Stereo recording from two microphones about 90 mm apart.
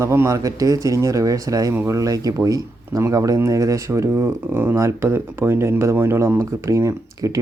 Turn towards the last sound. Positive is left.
turn(degrees=-35)  # may be behind; listen again after turning